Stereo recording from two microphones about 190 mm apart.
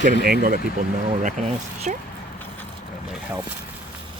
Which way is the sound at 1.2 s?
40° right (ahead or behind).